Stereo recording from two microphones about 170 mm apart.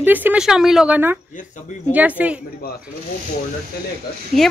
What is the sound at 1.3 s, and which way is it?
Speech, 45° left (ahead or behind).